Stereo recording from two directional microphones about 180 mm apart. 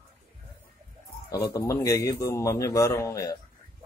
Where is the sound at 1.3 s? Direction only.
20° left (ahead or behind).